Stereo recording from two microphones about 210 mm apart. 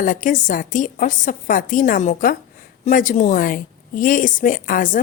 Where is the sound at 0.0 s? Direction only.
40° left (ahead or behind).